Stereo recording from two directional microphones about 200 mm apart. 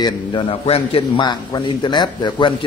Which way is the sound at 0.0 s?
25° left (ahead or behind).